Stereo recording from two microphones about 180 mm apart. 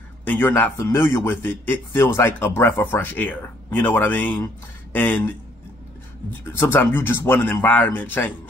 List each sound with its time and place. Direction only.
0.2 s speech: 10° left (ahead or behind)
6.4 s speech: 10° left (ahead or behind)